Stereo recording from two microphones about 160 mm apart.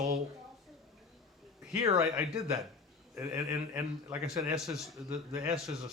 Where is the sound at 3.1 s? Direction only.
15° right (ahead or behind).